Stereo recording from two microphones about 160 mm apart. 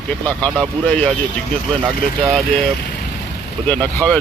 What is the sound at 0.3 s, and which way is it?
Speech, 5° left (ahead or behind).